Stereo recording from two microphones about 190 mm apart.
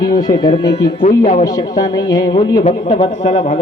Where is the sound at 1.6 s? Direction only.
20° left (ahead or behind); by 3.5 s 35° left (ahead or behind).